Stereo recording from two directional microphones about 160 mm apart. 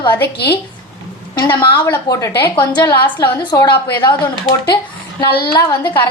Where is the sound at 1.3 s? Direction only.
30° left (ahead or behind).